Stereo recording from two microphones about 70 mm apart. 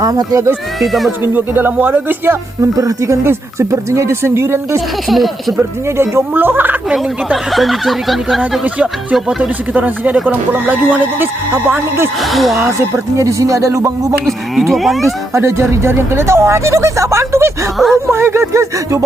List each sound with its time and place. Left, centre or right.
0.0 s speech: right
0.8 s speech: centre
1.2 s speech: right
2.6 s speech: right
5.0 s speech: centre
5.5 s speech: right
7.5 s speech: centre
9.4 s speech: right
12.2 s speech: centre
13.1 s speech: right
14.3 s speech: centre
15.3 s speech: right